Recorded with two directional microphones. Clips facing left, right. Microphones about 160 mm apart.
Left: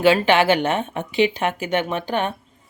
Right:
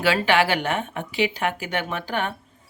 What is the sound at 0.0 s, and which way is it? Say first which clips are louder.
Speech: left 4 dB; 20° left (ahead or behind).